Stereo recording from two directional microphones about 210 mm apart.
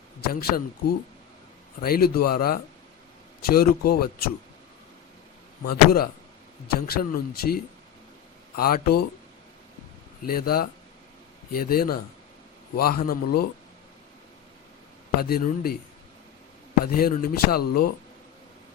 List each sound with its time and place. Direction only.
0.3 s speech: 45° left (ahead or behind)
6.7 s speech: 45° left (ahead or behind)
10.2 s speech: 45° left (ahead or behind)
15.2 s speech: 45° left (ahead or behind)
16.8 s speech: 45° left (ahead or behind)